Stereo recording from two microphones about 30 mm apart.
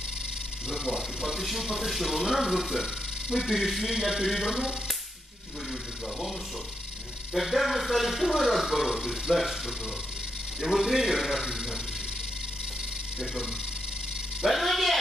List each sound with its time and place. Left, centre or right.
0.7 s speech: right
1.4 s speech: centre
3.5 s a man's voice: centre
7.3 s a man's voice: centre
9.3 s speech: centre
10.6 s a man's voice: centre
14.5 s speech: centre